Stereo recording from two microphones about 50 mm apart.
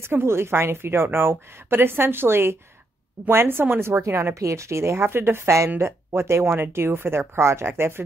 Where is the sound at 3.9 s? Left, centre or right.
Right.